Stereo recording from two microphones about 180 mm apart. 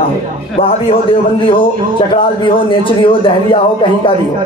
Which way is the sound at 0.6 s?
35° left (ahead or behind).